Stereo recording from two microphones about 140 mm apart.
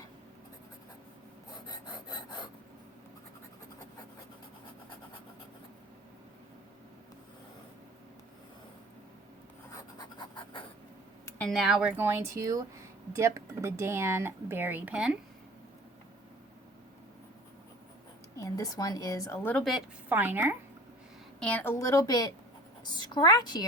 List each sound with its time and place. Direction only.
1.6 s filing: 30° left (ahead or behind)
9.7 s a sound: 30° left (ahead or behind)
11.3 s speech: centre (ahead or behind)
18.3 s a woman's voice: 25° left (ahead or behind)
20.1 s speech: 15° right (ahead or behind)
21.4 s a woman's voice: 10° left (ahead or behind); by 23.6 s 30° left (ahead or behind)